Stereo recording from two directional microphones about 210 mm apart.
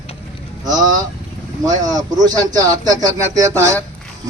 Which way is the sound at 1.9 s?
20° right (ahead or behind).